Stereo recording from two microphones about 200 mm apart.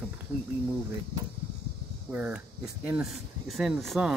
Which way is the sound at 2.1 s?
10° right (ahead or behind).